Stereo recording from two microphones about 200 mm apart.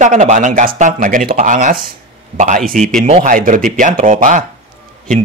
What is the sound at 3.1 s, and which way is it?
Speech, 35° right (ahead or behind).